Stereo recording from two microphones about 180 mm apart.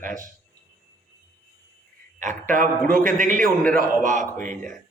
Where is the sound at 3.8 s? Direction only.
45° right (ahead or behind).